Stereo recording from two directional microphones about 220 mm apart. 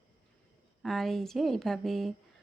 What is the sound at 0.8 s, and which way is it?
Speech, centre (ahead or behind).